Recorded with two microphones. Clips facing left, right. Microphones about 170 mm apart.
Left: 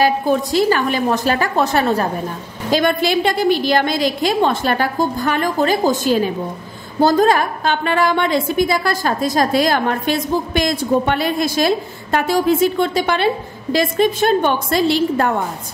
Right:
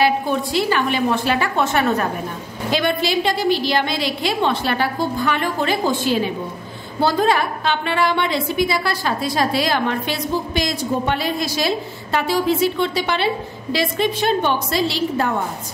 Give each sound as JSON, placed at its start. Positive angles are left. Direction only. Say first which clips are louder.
{"t": 0.0, "sound": "a woman's voice", "louder": "left 3 dB", "side_deg": 40}
{"t": 2.7, "sound": "a woman's voice", "louder": "left 4 dB", "side_deg": 50}